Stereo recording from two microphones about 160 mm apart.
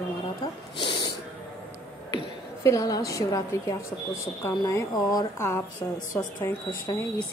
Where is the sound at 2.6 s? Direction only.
20° left (ahead or behind).